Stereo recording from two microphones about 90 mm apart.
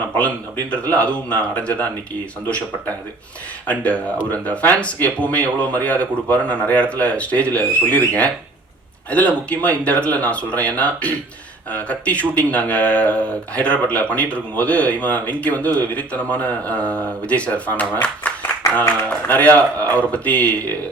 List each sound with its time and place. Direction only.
0.2 s speech: 15° left (ahead or behind)
3.7 s speech: 15° left (ahead or behind)
19.5 s speech: 15° left (ahead or behind)